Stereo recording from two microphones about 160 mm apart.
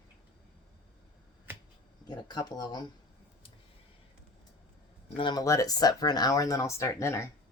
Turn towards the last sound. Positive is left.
turn(degrees=15)  # may be behind; listen again after turning